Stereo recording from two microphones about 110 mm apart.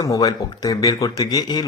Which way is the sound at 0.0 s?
35° left (ahead or behind).